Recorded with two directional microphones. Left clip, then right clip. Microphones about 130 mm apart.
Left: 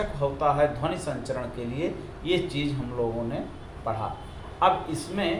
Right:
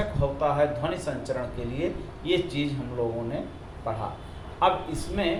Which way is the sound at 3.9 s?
15° left (ahead or behind).